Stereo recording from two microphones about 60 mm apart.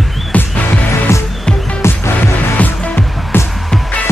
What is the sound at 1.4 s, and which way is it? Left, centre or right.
Music, centre.